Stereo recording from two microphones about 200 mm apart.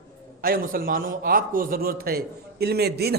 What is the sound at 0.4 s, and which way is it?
A man's voice, 45° right (ahead or behind).